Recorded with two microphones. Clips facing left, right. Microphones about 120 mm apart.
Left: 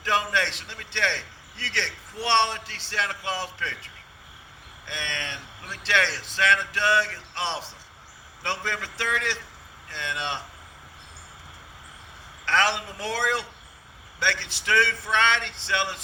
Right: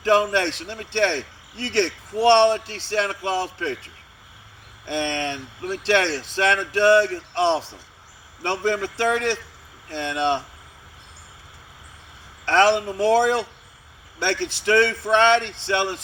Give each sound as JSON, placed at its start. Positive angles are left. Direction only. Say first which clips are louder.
{"t": 0.0, "sound": "a man's voice", "louder": "right 7 dB", "side_deg": -45}
{"t": 4.9, "sound": "a man's voice", "louder": "right 10 dB", "side_deg": -40}
{"t": 8.4, "sound": "a man's voice", "louder": "right 8 dB", "side_deg": -35}
{"t": 12.5, "sound": "a man's voice", "louder": "right 7 dB", "side_deg": -40}
{"t": 14.2, "sound": "a man's voice", "louder": "right 5 dB", "side_deg": -45}